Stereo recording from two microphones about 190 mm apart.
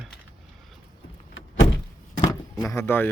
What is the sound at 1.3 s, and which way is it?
Door, 90° left.